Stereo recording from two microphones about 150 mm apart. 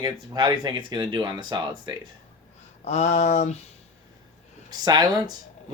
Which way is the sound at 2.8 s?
45° left (ahead or behind).